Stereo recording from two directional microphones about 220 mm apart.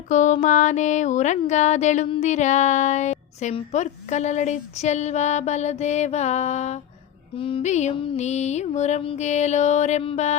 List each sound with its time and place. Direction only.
0.1 s music: 35° left (ahead or behind)